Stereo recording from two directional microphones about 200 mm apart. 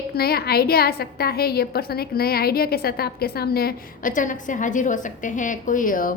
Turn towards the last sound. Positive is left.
turn(degrees=45)  # may be behind; listen again after turning